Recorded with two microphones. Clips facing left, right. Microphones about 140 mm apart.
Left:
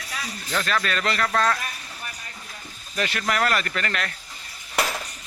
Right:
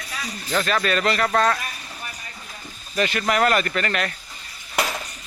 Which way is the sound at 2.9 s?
5° right (ahead or behind).